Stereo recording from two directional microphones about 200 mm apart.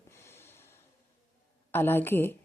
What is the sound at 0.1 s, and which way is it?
Snort, 10° left (ahead or behind).